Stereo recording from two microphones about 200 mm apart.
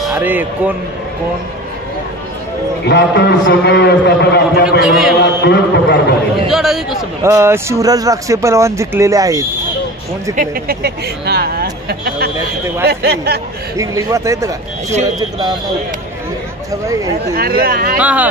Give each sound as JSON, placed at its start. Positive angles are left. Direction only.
{"t": 0.0, "sound": "speech", "side_deg": -5}
{"t": 2.9, "sound": "a man's voice", "side_deg": 60}
{"t": 4.6, "sound": "a man's voice", "side_deg": 0}
{"t": 5.2, "sound": "a sound", "side_deg": 60}
{"t": 6.5, "sound": "a man's voice", "side_deg": 0}
{"t": 7.2, "sound": "speech", "side_deg": -15}
{"t": 10.3, "sound": "speech", "side_deg": -45}
{"t": 13.7, "sound": "speech", "side_deg": -15}
{"t": 16.8, "sound": "speech", "side_deg": -15}
{"t": 17.4, "sound": "speech", "side_deg": -50}
{"t": 17.9, "sound": "speech", "side_deg": -5}